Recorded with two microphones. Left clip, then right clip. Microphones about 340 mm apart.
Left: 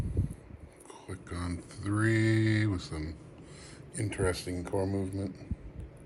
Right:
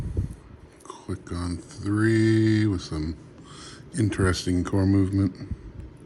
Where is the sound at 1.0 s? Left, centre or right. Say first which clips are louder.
Right 6 dB; centre.